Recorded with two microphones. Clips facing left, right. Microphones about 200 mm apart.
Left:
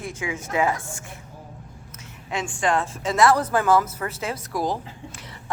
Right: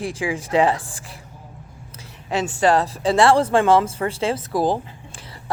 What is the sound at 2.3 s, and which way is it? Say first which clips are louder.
Speech: right 6 dB; 35° right (ahead or behind).